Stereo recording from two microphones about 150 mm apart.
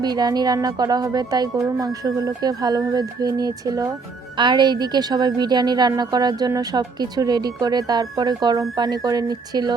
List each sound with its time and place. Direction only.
0.0 s a woman's voice: 25° right (ahead or behind)